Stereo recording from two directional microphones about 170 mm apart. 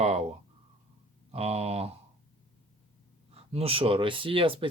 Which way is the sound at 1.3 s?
35° right (ahead or behind).